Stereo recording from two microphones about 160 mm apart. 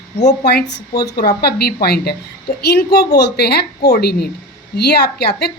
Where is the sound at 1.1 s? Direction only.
75° left (ahead or behind).